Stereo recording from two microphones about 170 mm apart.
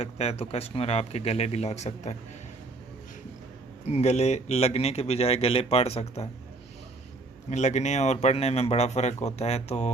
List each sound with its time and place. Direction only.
0.0 s speech: 35° left (ahead or behind)
3.8 s speech: 40° left (ahead or behind)
7.5 s speech: 45° left (ahead or behind)